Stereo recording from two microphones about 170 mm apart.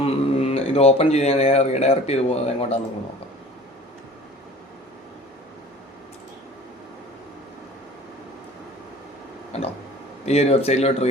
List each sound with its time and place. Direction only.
0.0 s speech: 35° left (ahead or behind)
9.5 s a sound: 40° left (ahead or behind)
10.2 s speech: 40° left (ahead or behind)